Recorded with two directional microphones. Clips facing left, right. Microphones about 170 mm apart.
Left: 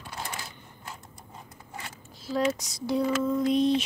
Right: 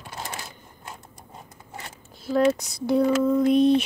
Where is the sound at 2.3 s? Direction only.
55° right (ahead or behind).